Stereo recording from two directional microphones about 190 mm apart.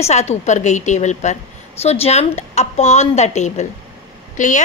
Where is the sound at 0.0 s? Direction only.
35° left (ahead or behind).